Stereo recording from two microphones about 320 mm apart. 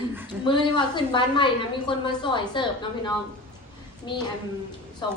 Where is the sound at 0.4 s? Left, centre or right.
Centre.